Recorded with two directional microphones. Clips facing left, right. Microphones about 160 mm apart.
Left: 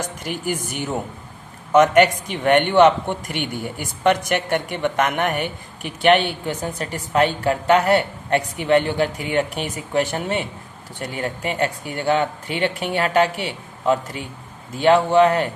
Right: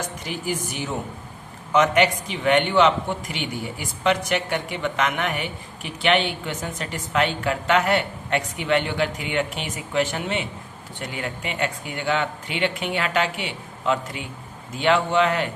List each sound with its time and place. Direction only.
1.7 s a man's voice: 50° left (ahead or behind)
6.6 s a woman's voice: 35° left (ahead or behind)